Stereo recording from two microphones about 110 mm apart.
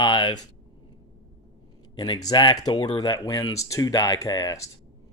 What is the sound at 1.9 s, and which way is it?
Speech, 40° left (ahead or behind).